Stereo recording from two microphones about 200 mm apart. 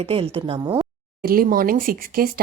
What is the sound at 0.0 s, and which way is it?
Speech, 30° right (ahead or behind).